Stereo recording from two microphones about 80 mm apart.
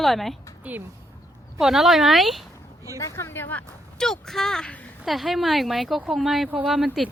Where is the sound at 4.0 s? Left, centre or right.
Centre.